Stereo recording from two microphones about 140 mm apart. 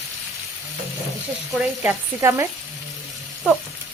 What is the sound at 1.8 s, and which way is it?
Speech, 15° right (ahead or behind).